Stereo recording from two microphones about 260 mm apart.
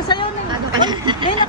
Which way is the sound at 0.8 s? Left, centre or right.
Centre.